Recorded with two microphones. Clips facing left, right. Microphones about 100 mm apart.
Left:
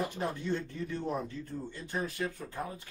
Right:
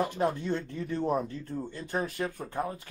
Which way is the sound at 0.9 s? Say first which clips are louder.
Right 8 dB; 55° right (ahead or behind).